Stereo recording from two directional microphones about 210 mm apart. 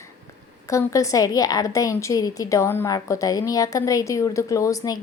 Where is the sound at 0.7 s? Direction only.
15° left (ahead or behind).